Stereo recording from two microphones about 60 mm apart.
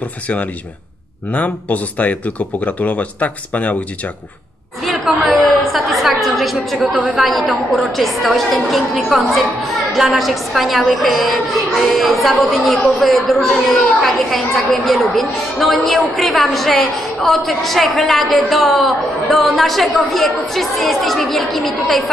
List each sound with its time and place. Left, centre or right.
1.3 s speech: left
4.8 s a woman's voice: centre